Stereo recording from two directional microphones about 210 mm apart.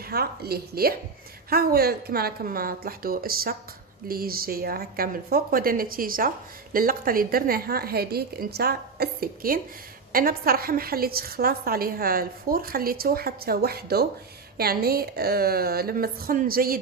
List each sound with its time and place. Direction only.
0.0 s a woman's voice: 45° right (ahead or behind)